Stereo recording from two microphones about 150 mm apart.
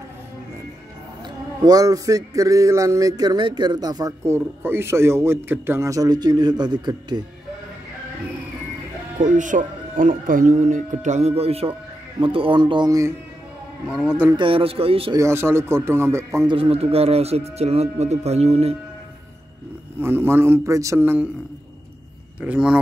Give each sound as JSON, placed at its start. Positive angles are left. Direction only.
{"t": 1.6, "sound": "speech", "side_deg": -25}
{"t": 9.2, "sound": "speech", "side_deg": -55}
{"t": 14.0, "sound": "speech", "side_deg": -10}
{"t": 14.3, "sound": "speech", "side_deg": -35}
{"t": 15.1, "sound": "speech", "side_deg": -20}
{"t": 16.4, "sound": "speech", "side_deg": -35}
{"t": 20.0, "sound": "speech", "side_deg": -15}
{"t": 22.4, "sound": "speech", "side_deg": -5}